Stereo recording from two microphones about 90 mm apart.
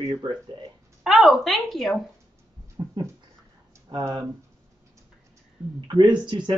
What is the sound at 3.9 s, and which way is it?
Speech, 60° right (ahead or behind).